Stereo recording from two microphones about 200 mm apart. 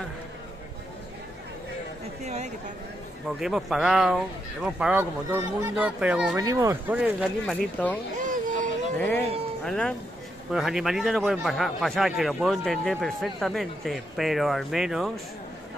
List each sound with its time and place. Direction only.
2.2 s speech: 35° right (ahead or behind)
3.3 s a man's voice: centre (ahead or behind)
6.3 s speech: 15° right (ahead or behind)
8.2 s a sound: 40° right (ahead or behind)
8.9 s a man's voice: 10° left (ahead or behind)